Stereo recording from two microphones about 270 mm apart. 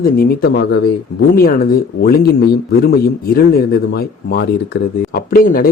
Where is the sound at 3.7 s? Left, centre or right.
Left.